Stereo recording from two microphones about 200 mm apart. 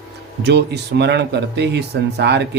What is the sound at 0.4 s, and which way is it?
Speech, 55° right (ahead or behind).